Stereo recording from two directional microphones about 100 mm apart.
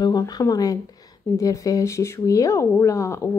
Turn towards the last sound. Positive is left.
turn(degrees=30)  # may be behind; listen again after turning